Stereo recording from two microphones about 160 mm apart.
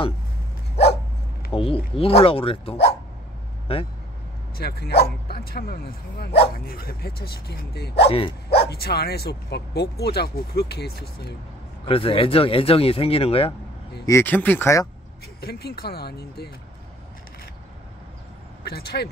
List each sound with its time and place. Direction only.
1.5 s a sound: 35° left (ahead or behind)
2.0 s speech: 35° left (ahead or behind)
4.6 s speech: 85° left
11.9 s speech: 35° left (ahead or behind)
14.0 s speech: 15° left (ahead or behind)
15.4 s speech: 75° left (ahead or behind)
18.6 s speech: 80° left